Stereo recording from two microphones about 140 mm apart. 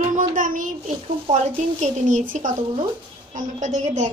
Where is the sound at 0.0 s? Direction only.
65° right (ahead or behind).